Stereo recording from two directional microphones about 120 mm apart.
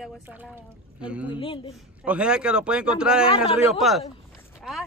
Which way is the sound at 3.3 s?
50° left (ahead or behind).